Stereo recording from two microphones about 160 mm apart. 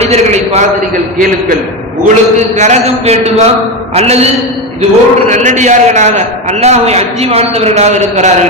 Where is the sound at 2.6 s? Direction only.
45° right (ahead or behind).